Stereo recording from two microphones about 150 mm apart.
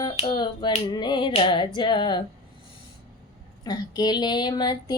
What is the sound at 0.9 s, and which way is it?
Female singing, 30° left (ahead or behind).